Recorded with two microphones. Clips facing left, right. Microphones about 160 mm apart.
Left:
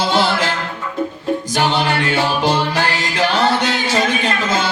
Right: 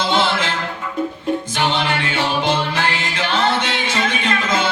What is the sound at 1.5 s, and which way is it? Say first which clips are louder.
Music: left 6 dB; 40° left (ahead or behind).